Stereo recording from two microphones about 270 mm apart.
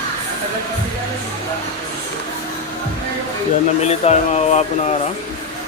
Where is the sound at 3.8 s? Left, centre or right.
Left.